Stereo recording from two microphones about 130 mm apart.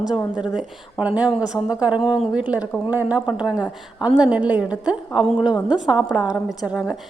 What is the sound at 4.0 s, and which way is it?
Speech, 35° left (ahead or behind).